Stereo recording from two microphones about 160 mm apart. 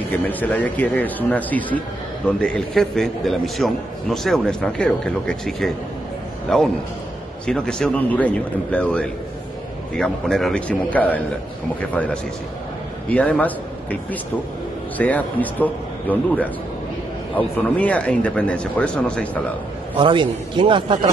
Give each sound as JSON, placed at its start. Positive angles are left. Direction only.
{"t": 0.1, "sound": "a man's voice", "side_deg": 10}
{"t": 20.0, "sound": "a man's voice", "side_deg": -30}